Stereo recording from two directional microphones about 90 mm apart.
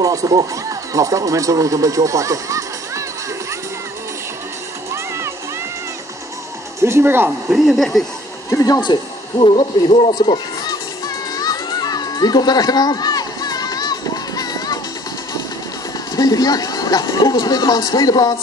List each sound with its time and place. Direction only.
0.0 s speech: 40° right (ahead or behind)
6.8 s speech: 30° right (ahead or behind)
7.2 s speech: 5° right (ahead or behind)
8.5 s speech: 35° left (ahead or behind)
8.8 s a man's voice: 60° left (ahead or behind); by 10.1 s 80° left
11.3 s children playing: 45° left (ahead or behind)
16.2 s speech: 45° left (ahead or behind)